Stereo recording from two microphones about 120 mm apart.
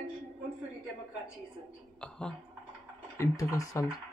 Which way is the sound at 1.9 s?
5° left (ahead or behind).